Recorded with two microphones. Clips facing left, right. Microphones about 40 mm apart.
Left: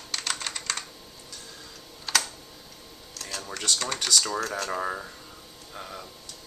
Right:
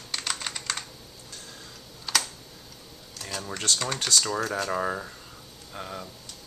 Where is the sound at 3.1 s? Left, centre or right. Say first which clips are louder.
Right 1 dB; centre.